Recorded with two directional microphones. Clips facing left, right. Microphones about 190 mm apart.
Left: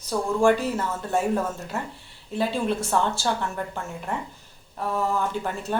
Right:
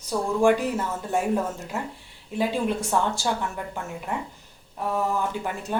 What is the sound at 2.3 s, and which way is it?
Speech, 15° right (ahead or behind).